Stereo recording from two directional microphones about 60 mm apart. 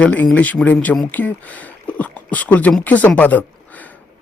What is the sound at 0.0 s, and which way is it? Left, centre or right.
A man's voice, left.